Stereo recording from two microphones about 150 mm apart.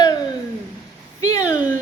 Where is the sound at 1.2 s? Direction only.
20° left (ahead or behind).